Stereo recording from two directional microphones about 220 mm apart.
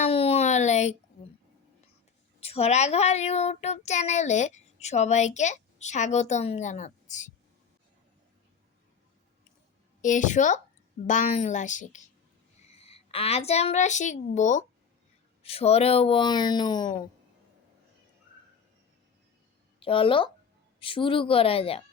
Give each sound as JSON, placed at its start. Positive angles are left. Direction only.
{"t": 0.0, "sound": "a sound", "side_deg": 25}
{"t": 2.4, "sound": "a child's voice", "side_deg": 25}
{"t": 10.0, "sound": "a child's voice", "side_deg": 35}
{"t": 19.8, "sound": "speech", "side_deg": 25}